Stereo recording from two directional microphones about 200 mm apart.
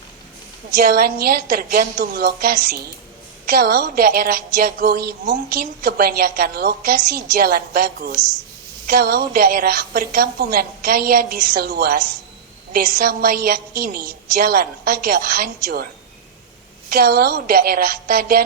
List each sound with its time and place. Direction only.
0.7 s a woman's voice: 50° right (ahead or behind)
16.9 s a woman's voice: 50° right (ahead or behind)